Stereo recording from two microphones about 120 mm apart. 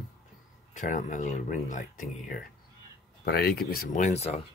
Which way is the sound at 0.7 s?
90° left.